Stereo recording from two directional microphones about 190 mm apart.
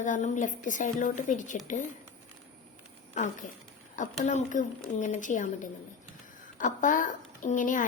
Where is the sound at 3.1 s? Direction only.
40° left (ahead or behind).